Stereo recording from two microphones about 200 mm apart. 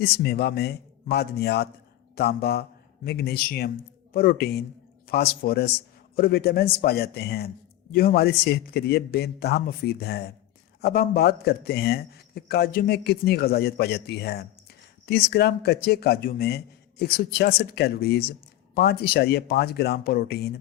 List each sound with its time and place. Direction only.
0.0 s a man's voice: 50° left (ahead or behind)